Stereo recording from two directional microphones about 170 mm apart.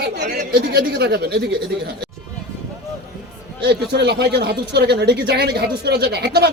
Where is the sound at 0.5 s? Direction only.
70° right (ahead or behind).